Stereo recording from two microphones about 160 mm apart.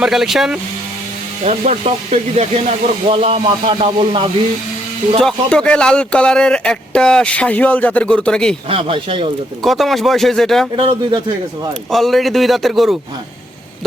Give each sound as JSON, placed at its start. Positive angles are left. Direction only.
{"t": 0.0, "sound": "speech", "side_deg": 0}
{"t": 1.5, "sound": "speech", "side_deg": -45}
{"t": 5.2, "sound": "speech", "side_deg": 5}
{"t": 8.7, "sound": "speech", "side_deg": -35}
{"t": 9.6, "sound": "speech", "side_deg": 0}
{"t": 10.8, "sound": "speech", "side_deg": -30}
{"t": 11.9, "sound": "speech", "side_deg": 0}